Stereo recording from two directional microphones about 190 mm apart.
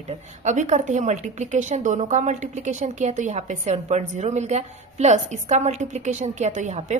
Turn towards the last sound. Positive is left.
turn(degrees=-40)  # may be behind; listen again after turning